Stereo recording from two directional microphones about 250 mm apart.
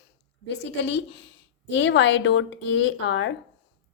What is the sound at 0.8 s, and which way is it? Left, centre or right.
A woman's voice, left.